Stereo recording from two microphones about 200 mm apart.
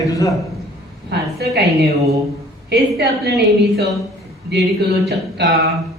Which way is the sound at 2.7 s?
55° right (ahead or behind).